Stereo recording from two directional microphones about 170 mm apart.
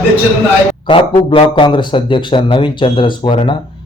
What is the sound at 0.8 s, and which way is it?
A man's voice, 30° left (ahead or behind).